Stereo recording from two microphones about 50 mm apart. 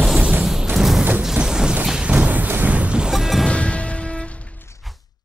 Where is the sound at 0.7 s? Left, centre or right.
Centre.